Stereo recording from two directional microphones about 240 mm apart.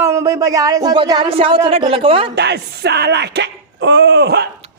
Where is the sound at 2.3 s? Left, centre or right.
Right.